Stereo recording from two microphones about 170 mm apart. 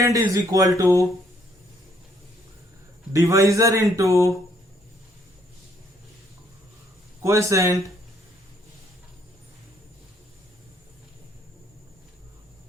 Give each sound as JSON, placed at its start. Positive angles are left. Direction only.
{"t": 0.0, "sound": "speech", "side_deg": -20}
{"t": 3.1, "sound": "speech", "side_deg": -20}
{"t": 7.2, "sound": "a man's voice", "side_deg": -15}